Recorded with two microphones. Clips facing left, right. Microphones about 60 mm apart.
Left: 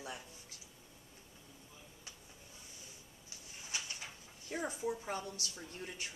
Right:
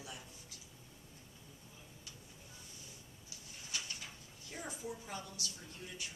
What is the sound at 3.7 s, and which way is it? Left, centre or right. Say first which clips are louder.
Bird: left 1 dB; left.